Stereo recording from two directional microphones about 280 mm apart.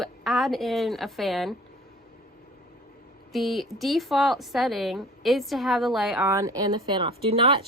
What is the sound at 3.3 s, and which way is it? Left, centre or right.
A woman's voice, centre.